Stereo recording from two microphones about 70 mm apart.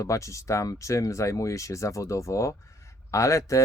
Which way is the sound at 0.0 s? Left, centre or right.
Left.